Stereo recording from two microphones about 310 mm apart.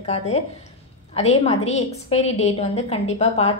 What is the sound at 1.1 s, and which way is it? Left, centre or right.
A woman's voice, centre.